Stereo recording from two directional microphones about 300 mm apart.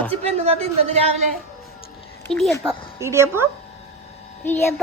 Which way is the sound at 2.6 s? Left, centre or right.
Centre.